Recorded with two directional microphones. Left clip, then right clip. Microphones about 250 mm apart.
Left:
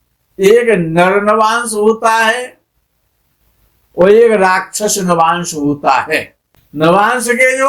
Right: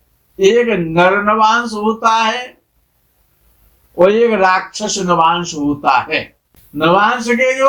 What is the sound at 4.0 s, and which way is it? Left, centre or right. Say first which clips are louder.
Speech: left 3 dB; left.